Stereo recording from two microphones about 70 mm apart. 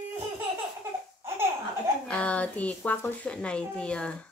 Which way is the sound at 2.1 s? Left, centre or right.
Centre.